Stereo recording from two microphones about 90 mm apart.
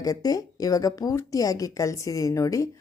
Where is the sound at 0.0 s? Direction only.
45° left (ahead or behind).